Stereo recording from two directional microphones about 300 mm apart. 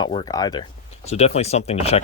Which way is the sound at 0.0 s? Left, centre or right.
Centre.